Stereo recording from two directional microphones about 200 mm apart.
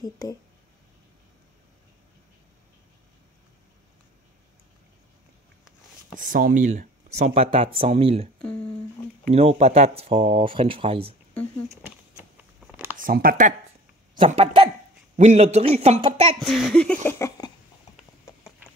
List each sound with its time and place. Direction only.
0.0 s speech: 15° left (ahead or behind)
6.1 s speech: 45° right (ahead or behind)
9.3 s speech: 30° right (ahead or behind)
11.7 s a sound: 10° right (ahead or behind)
12.9 s speech: 45° right (ahead or behind)
14.1 s speech: 30° right (ahead or behind)
16.3 s speech: centre (ahead or behind)